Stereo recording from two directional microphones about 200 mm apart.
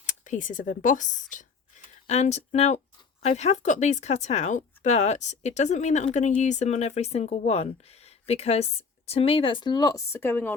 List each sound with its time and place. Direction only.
0.0 s speech: 40° left (ahead or behind); by 10.5 s 10° left (ahead or behind)